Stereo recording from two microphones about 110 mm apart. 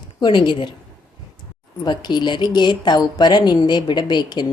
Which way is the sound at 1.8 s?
40° left (ahead or behind).